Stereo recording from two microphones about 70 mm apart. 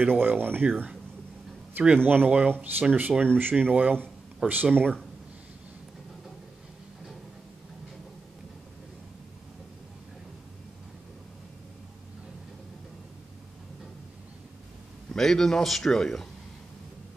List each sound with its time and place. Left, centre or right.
0.0 s speech: right
4.4 s speech: centre
15.1 s a man's voice: centre